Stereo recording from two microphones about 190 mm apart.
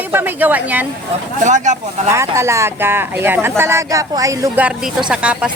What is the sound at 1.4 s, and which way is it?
Speech, 40° right (ahead or behind).